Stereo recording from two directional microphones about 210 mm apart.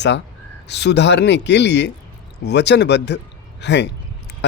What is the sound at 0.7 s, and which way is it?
Speech, 55° left (ahead or behind).